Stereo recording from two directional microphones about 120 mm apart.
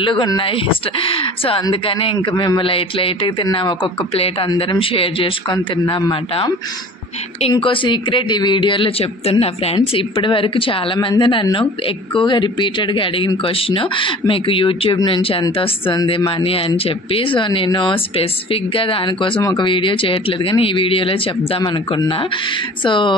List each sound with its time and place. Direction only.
0.0 s speech: 45° left (ahead or behind)
7.5 s speech: 45° left (ahead or behind)
9.8 s speech: 40° left (ahead or behind)